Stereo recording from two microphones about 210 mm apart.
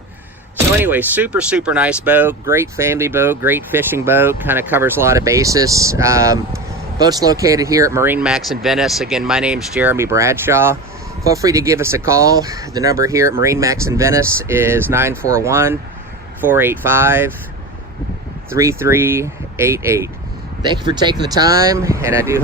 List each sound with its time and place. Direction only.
0.8 s speech: 10° right (ahead or behind)
18.5 s speech: 15° right (ahead or behind)